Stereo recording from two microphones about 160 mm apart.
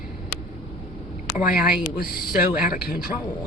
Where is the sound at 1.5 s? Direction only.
Centre (ahead or behind).